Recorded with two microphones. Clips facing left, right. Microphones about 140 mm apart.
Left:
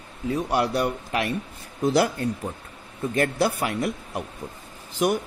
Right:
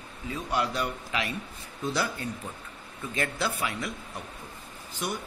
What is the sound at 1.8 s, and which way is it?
Speech, 70° left (ahead or behind).